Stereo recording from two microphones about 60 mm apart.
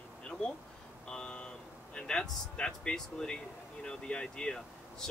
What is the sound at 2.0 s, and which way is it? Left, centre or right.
Speech, centre.